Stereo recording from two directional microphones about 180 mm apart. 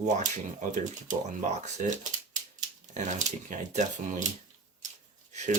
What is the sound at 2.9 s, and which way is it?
Speech, 40° right (ahead or behind).